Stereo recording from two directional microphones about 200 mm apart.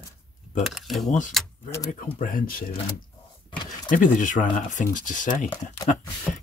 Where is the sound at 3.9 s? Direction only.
40° left (ahead or behind).